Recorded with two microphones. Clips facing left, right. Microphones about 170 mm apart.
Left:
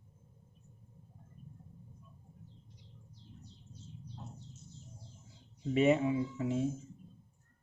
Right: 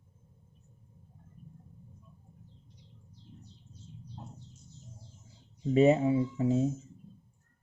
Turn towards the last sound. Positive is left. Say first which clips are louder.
# right 5 dB
turn(degrees=-35)  # may be behind; listen again after turning